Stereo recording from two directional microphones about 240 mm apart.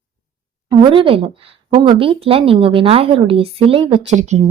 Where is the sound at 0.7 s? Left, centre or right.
Right.